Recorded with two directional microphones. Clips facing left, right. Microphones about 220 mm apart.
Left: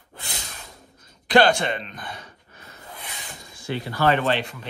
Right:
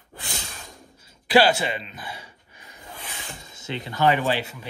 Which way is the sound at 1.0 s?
10° right (ahead or behind).